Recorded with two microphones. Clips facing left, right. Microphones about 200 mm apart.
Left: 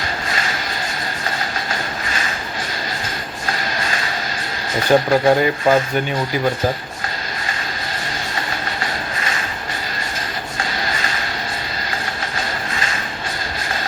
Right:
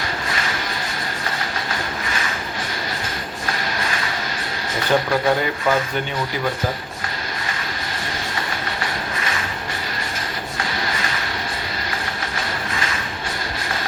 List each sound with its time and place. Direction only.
4.8 s speech: 40° left (ahead or behind)